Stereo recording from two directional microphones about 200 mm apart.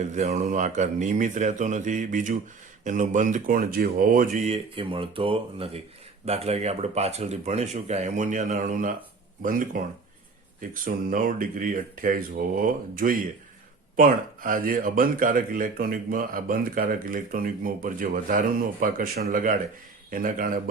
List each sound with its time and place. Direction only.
0.0 s speech: 35° right (ahead or behind)